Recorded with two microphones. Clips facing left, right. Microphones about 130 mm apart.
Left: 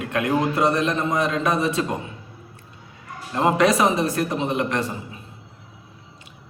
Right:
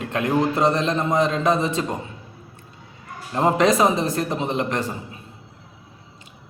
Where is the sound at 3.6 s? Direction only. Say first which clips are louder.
Right 1 dB; 25° right (ahead or behind).